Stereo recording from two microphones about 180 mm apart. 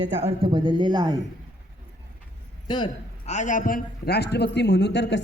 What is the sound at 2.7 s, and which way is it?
Speech, 25° left (ahead or behind).